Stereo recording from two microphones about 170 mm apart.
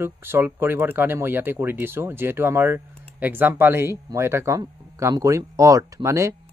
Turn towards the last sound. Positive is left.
turn(degrees=-15)  # may be behind; listen again after turning